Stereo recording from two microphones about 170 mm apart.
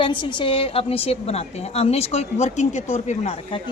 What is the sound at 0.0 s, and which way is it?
A woman's voice, 30° left (ahead or behind).